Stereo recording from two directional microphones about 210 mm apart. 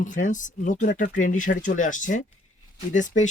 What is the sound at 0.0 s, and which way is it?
Speech, 35° left (ahead or behind).